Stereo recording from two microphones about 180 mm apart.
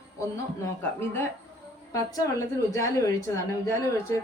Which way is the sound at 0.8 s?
10° left (ahead or behind).